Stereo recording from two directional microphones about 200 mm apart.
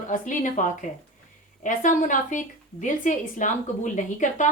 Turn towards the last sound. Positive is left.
turn(degrees=40)  # may be behind; listen again after turning